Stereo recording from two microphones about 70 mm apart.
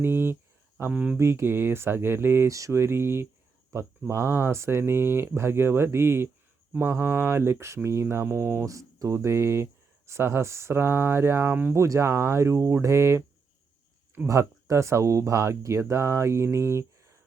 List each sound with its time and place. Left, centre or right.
0.0 s speech: right
2.5 s speech: right
3.7 s speech: right
4.1 s speech: right
8.6 s speech: right
11.7 s speech: right
14.3 s speech: right